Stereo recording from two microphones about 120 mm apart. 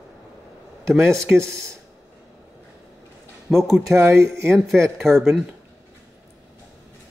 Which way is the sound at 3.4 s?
Centre (ahead or behind).